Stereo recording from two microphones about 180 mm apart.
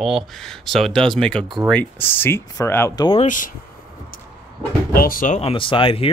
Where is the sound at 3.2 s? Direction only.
45° left (ahead or behind).